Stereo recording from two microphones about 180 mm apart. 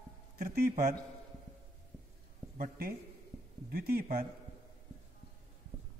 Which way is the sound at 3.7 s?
60° right (ahead or behind).